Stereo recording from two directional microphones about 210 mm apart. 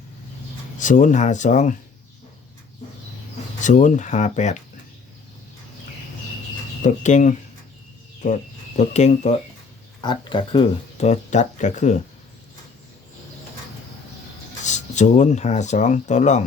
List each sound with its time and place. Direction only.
0.8 s speech: 35° left (ahead or behind)
3.6 s speech: 35° left (ahead or behind)
6.8 s speech: 35° left (ahead or behind)
10.0 s speech: 20° left (ahead or behind)
14.6 s speech: 35° left (ahead or behind)